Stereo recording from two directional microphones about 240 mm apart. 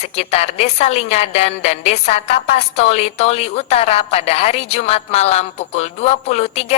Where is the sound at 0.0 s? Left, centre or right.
Left.